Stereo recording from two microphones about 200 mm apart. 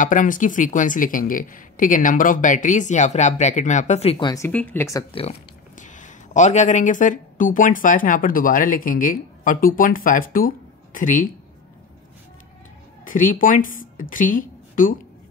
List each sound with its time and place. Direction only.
0.0 s speech: 40° left (ahead or behind)
4.3 s speech: 10° left (ahead or behind)
5.1 s speech: 30° left (ahead or behind)
13.0 s a woman's voice: 40° left (ahead or behind)